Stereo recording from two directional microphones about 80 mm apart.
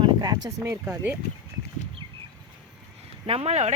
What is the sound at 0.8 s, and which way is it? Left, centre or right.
Speech, right.